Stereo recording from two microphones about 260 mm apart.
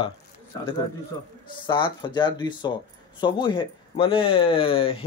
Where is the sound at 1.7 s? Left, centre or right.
Centre.